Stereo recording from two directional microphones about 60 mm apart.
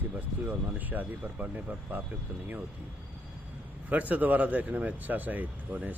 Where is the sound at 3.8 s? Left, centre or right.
Right.